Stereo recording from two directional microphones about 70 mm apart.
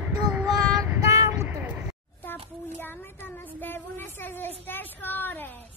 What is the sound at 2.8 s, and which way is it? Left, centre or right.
Child singing, left.